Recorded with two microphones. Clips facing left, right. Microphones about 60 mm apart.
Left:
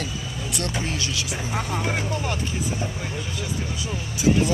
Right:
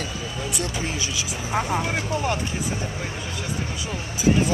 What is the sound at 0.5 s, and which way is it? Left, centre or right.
Speech, centre.